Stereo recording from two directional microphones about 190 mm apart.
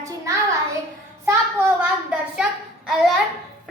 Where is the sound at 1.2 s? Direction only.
10° right (ahead or behind).